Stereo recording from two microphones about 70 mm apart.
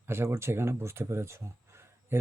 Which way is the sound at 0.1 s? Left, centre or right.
Right.